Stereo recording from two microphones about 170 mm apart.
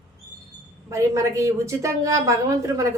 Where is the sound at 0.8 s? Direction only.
15° right (ahead or behind).